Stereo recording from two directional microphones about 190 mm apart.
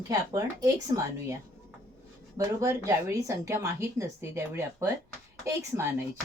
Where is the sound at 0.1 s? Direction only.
15° right (ahead or behind).